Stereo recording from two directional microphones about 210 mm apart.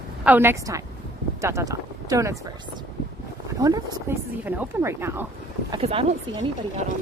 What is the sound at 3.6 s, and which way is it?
Speech, 15° right (ahead or behind).